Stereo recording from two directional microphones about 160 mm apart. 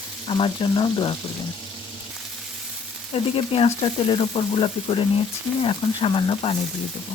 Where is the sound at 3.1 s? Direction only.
35° left (ahead or behind).